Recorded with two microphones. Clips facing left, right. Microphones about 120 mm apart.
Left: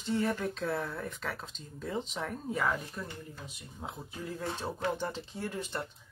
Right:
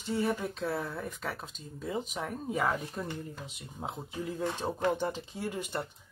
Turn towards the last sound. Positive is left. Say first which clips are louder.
# right 2 dB
turn(degrees=-15)  # may be behind; listen again after turning